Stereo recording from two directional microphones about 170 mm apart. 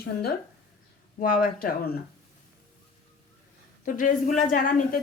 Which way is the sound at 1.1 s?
55° left (ahead or behind).